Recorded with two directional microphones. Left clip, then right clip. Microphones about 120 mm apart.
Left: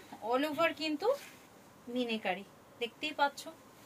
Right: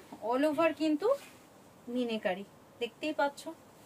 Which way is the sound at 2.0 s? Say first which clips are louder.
Right 2 dB; 50° right (ahead or behind).